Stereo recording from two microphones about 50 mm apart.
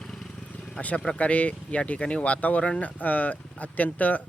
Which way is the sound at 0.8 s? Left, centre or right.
Left.